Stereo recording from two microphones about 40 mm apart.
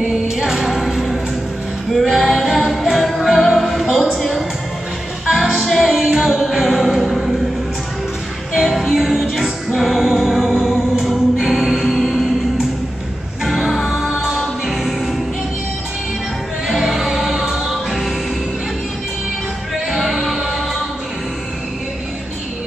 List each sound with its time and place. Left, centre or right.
0.1 s music: centre
5.9 s music: centre
6.2 s music: centre
8.5 s music: centre
13.5 s music: centre
16.6 s music: centre
19.9 s music: centre